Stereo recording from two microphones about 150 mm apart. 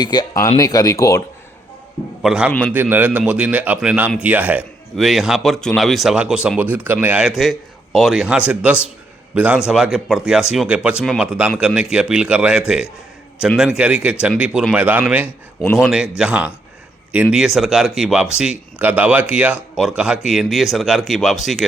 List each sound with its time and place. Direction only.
0.0 s speech: 30° left (ahead or behind)
2.2 s a man's voice: 5° right (ahead or behind)